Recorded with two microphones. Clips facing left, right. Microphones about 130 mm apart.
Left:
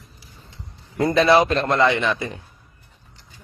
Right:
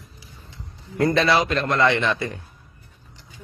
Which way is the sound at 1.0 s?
20° left (ahead or behind).